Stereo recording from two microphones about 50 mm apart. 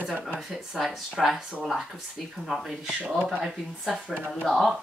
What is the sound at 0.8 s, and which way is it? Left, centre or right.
Speech, centre.